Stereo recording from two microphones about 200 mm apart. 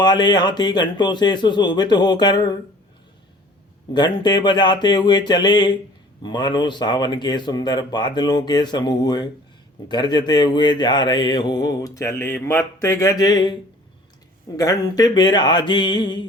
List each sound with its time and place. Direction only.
0.0 s mantra: 20° left (ahead or behind)
3.9 s mantra: 20° left (ahead or behind)